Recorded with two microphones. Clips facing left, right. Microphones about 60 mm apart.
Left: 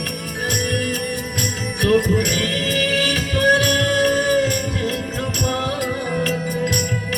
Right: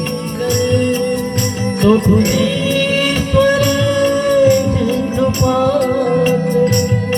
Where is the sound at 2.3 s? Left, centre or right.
Right.